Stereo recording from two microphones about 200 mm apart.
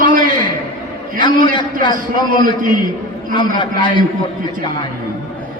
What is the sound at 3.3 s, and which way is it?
Speech, 25° left (ahead or behind).